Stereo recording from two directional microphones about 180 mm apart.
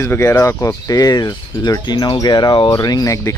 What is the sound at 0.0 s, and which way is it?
Speech, 15° left (ahead or behind).